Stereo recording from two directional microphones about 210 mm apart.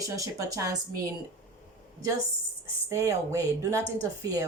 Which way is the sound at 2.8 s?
15° right (ahead or behind).